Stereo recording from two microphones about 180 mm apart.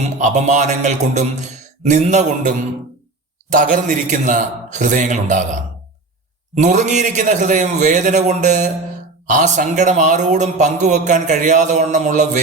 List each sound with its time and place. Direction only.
0.0 s a man's voice: 40° right (ahead or behind)
3.5 s a man's voice: 45° right (ahead or behind)
6.5 s a man's voice: 40° right (ahead or behind)